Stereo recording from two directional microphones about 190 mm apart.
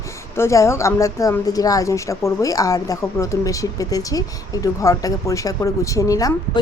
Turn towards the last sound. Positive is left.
turn(degrees=20)  # may be behind; listen again after turning